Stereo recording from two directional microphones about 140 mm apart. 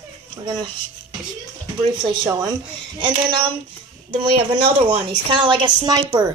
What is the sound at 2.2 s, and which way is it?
Speech, 25° right (ahead or behind).